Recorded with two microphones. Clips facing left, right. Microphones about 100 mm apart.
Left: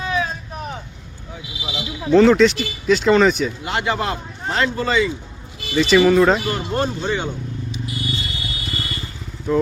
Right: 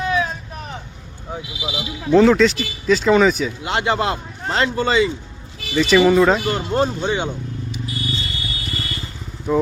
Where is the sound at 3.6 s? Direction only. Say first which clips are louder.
Right 5 dB; 25° right (ahead or behind).